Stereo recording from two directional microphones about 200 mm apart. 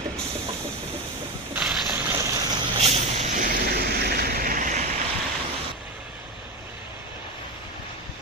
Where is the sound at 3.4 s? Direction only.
50° right (ahead or behind).